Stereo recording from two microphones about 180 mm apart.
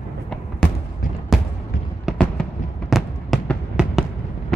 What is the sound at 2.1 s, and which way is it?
Fireworks, 5° left (ahead or behind).